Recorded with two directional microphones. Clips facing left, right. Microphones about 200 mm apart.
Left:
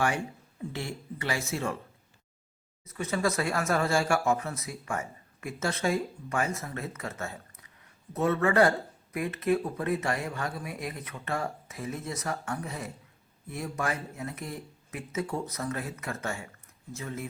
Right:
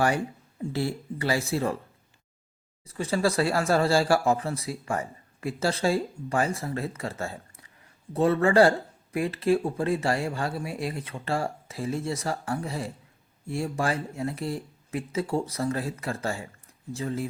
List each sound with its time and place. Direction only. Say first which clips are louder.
0.6 s speech: right 7 dB; 35° right (ahead or behind)
2.8 s speech: right 3 dB; 30° right (ahead or behind)